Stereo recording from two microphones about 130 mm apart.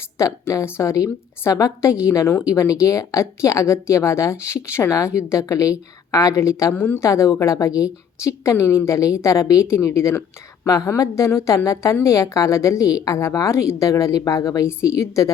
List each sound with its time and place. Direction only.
0.2 s a woman's voice: 25° left (ahead or behind)